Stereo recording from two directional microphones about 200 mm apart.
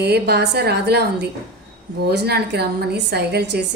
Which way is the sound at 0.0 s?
55° right (ahead or behind).